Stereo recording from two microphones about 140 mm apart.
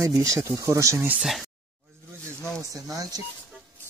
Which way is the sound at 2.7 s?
25° right (ahead or behind).